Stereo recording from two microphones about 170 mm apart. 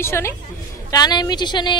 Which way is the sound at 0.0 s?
15° left (ahead or behind).